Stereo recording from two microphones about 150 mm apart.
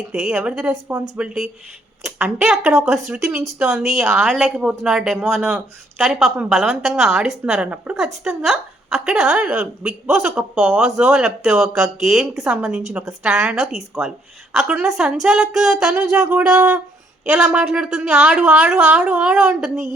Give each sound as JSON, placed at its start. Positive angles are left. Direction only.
{"t": 0.1, "sound": "a woman's voice", "side_deg": -5}